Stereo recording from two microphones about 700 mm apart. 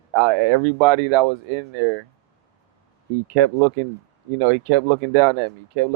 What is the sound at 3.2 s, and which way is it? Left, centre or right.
Speech, right.